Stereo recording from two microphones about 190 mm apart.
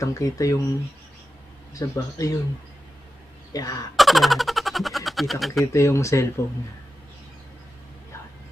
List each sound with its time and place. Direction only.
0.0 s speech: 15° left (ahead or behind)
1.7 s speech: 20° left (ahead or behind)
3.5 s speech: 20° left (ahead or behind)
3.9 s speech: centre (ahead or behind)
5.7 s speech: 15° left (ahead or behind)